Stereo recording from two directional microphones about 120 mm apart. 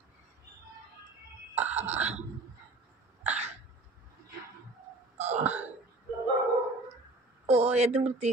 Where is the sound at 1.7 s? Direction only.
70° right (ahead or behind).